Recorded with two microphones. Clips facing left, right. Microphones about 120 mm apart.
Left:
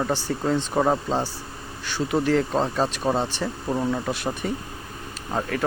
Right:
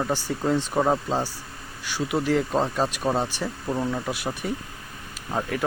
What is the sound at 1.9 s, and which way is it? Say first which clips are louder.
Speech: left 2 dB; 10° right (ahead or behind).